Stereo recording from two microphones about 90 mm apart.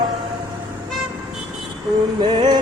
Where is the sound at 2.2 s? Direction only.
60° right (ahead or behind).